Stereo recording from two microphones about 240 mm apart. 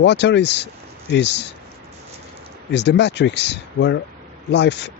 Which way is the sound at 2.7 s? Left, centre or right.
Left.